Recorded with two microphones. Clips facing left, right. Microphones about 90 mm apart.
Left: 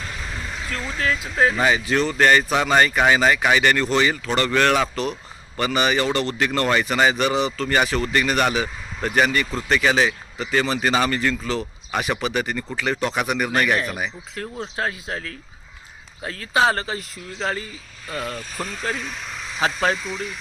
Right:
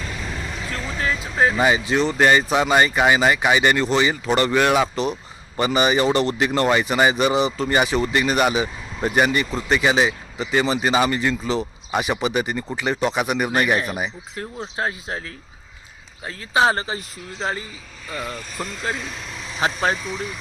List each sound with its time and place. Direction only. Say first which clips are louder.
0.7 s speech: left 1 dB; 10° right (ahead or behind)
12.0 s speech: right 1 dB; 10° right (ahead or behind)
16.2 s speech: right 1 dB; 10° right (ahead or behind)